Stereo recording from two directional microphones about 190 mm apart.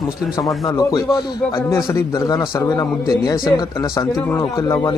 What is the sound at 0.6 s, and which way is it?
A man's voice, 15° left (ahead or behind).